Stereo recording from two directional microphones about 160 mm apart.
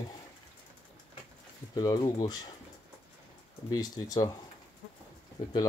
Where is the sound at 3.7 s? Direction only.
25° left (ahead or behind).